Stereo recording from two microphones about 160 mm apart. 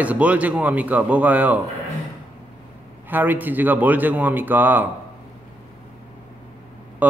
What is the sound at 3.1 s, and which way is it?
Speech, 10° right (ahead or behind).